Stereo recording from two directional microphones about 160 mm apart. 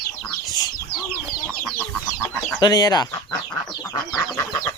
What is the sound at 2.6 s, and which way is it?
Speech, 25° left (ahead or behind).